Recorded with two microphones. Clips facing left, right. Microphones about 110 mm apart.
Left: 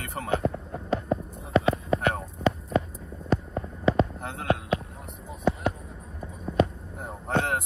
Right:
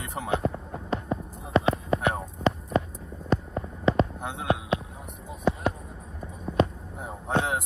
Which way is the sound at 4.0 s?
Centre (ahead or behind).